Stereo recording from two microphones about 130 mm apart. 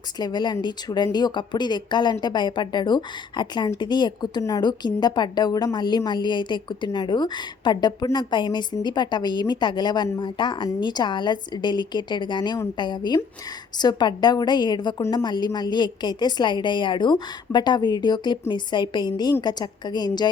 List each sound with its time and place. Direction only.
0.2 s a woman's voice: 30° left (ahead or behind)